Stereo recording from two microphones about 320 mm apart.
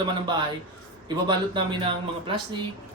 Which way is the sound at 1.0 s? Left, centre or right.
Centre.